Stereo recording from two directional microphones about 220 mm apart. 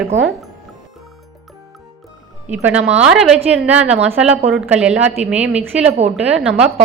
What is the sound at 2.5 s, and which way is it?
A woman's voice, 5° right (ahead or behind).